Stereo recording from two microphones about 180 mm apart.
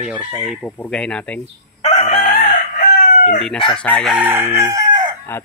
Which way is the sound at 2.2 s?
45° left (ahead or behind).